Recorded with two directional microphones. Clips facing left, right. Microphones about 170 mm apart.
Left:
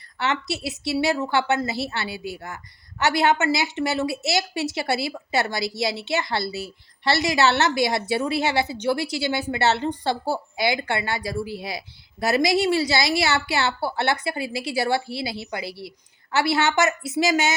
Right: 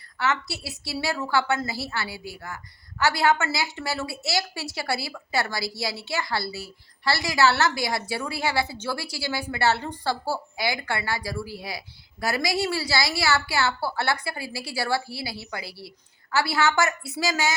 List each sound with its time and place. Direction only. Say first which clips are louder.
0.2 s a woman's voice: left 2 dB; 20° left (ahead or behind)